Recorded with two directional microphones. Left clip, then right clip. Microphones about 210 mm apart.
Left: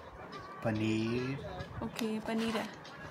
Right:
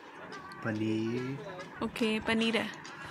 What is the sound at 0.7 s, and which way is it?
Music, 35° left (ahead or behind).